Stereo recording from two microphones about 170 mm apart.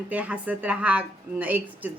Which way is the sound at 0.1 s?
10° right (ahead or behind).